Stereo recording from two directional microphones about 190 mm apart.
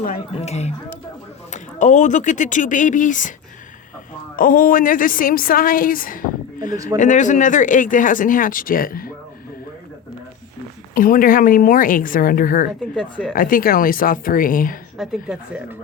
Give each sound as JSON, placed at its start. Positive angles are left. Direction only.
{"t": 0.0, "sound": "speech", "side_deg": 40}
{"t": 4.4, "sound": "speech", "side_deg": 45}
{"t": 10.9, "sound": "speech", "side_deg": 45}
{"t": 13.0, "sound": "a woman's voice", "side_deg": 5}
{"t": 13.3, "sound": "speech", "side_deg": 50}
{"t": 14.9, "sound": "a woman's voice", "side_deg": -5}